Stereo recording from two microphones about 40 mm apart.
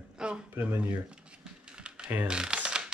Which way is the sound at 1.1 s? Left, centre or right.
Right.